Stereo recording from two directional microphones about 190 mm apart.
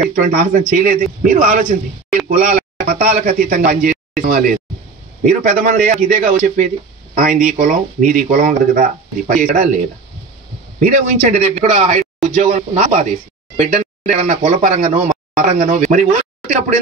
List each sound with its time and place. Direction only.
0.1 s speech: 50° right (ahead or behind)
10.8 s speech: 40° right (ahead or behind)